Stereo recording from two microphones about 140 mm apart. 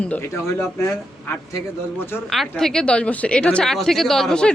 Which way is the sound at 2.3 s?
Centre (ahead or behind).